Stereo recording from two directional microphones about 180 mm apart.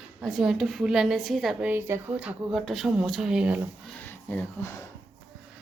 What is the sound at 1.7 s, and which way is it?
A woman's voice, 10° right (ahead or behind).